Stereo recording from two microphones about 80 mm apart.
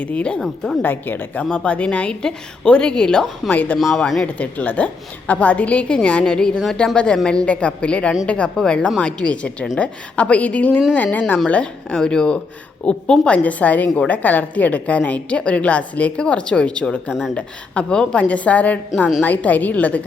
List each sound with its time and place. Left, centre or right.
0.0 s a woman's voice: centre
0.4 s speech: centre
0.8 s a woman's voice: left; by 3.5 s centre
3.5 s a woman's voice: centre
3.8 s speech: centre
4.4 s a woman's voice: left